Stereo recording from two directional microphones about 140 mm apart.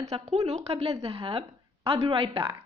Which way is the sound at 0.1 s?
45° right (ahead or behind).